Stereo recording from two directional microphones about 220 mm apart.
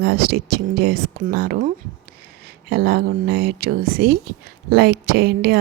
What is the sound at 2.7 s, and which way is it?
Speech, 45° right (ahead or behind).